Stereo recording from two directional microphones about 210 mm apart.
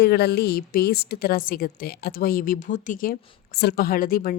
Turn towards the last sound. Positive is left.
turn(degrees=45)  # may be behind; listen again after turning